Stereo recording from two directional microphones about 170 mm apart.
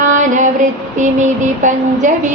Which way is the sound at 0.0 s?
45° right (ahead or behind).